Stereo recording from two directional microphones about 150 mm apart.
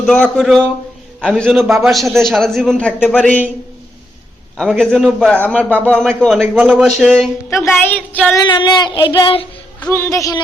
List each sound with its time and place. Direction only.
0.0 s a man's voice: 5° left (ahead or behind)
4.5 s a man's voice: 5° left (ahead or behind)
8.4 s child singing: 30° left (ahead or behind)
9.8 s a man's voice: 15° left (ahead or behind)